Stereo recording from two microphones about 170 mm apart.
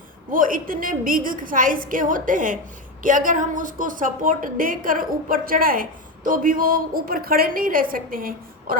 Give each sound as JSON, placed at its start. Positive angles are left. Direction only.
{"t": 0.3, "sound": "a woman's voice", "side_deg": -55}